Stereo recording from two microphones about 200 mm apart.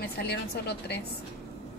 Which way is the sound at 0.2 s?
55° left (ahead or behind).